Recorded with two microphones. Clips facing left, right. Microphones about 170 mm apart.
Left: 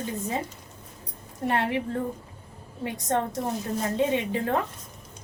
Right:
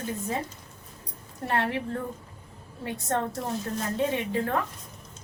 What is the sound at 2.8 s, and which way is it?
A woman's voice, 15° left (ahead or behind).